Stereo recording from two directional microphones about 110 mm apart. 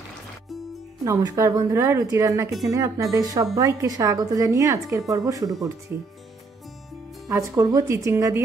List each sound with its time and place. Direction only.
1.0 s a woman's voice: 30° right (ahead or behind)
5.9 s speech: 15° right (ahead or behind)
7.2 s a woman's voice: 30° right (ahead or behind)